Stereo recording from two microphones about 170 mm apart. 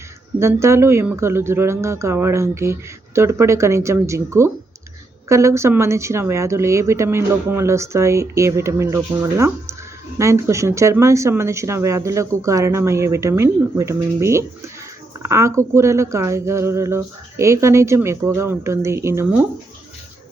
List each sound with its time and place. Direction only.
0.3 s a woman's voice: 15° right (ahead or behind)